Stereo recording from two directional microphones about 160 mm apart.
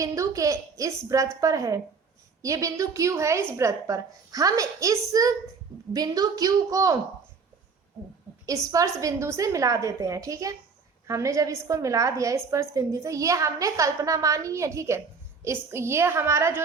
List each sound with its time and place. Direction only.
0.0 s a woman's voice: 20° right (ahead or behind)
8.4 s a woman's voice: 20° right (ahead or behind)